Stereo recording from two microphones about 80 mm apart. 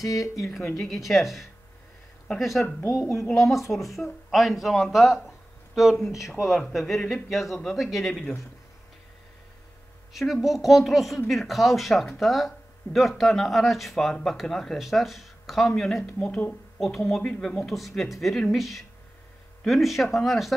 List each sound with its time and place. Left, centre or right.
0.5 s speech: centre
2.9 s a woman's voice: left
3.2 s speech: centre
10.1 s speech: centre
16.1 s speech: centre
16.8 s speech: centre